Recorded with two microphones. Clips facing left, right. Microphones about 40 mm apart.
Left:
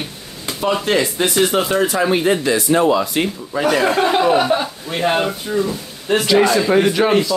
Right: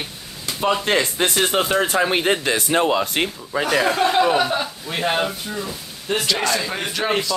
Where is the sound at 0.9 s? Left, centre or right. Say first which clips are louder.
Left 2 dB; right.